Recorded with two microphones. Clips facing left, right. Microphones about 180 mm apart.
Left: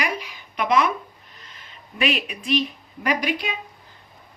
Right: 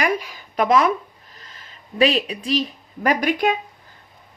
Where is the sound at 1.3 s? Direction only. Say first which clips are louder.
Right 2 dB; 35° right (ahead or behind).